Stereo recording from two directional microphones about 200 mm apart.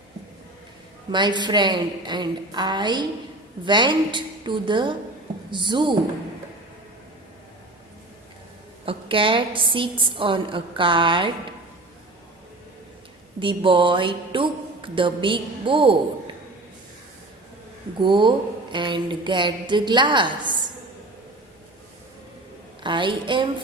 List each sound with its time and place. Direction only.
1.1 s a woman's voice: 20° right (ahead or behind)
8.9 s a woman's voice: 25° right (ahead or behind)
13.4 s a woman's voice: 25° right (ahead or behind)
18.0 s a woman's voice: 25° right (ahead or behind)
22.8 s a woman's voice: 25° right (ahead or behind)